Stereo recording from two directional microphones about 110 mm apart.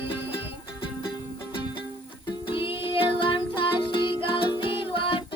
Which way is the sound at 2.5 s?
50° left (ahead or behind).